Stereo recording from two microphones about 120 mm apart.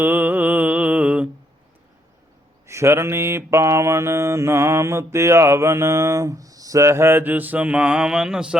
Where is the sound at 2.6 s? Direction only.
25° right (ahead or behind).